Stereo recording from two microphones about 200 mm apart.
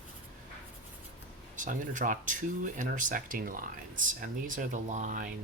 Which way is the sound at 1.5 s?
40° right (ahead or behind).